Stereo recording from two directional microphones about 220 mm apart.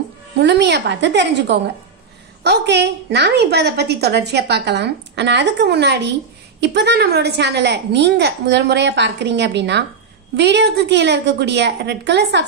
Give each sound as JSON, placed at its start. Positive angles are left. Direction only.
{"t": 0.4, "sound": "a woman's voice", "side_deg": -50}